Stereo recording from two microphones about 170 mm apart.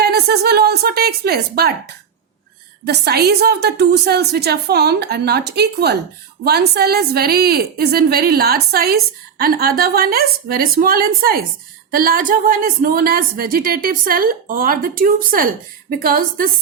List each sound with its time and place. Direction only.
0.0 s a woman's voice: 70° right (ahead or behind)